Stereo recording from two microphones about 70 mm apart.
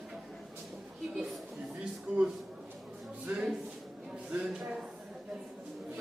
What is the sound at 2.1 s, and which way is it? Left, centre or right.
Speech, right.